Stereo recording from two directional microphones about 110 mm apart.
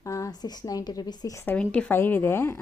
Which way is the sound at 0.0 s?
30° left (ahead or behind).